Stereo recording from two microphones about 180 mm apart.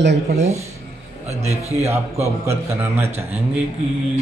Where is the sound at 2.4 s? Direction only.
15° right (ahead or behind).